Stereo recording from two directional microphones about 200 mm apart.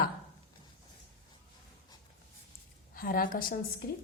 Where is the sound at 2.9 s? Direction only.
45° left (ahead or behind).